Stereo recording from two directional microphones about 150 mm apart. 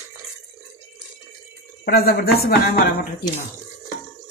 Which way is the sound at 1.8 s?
90° left.